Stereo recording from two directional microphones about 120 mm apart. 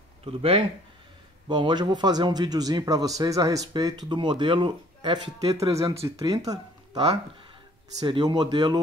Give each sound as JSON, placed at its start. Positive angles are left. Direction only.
{"t": 0.2, "sound": "speech", "side_deg": -50}
{"t": 1.5, "sound": "speech", "side_deg": -40}
{"t": 6.0, "sound": "speech", "side_deg": -30}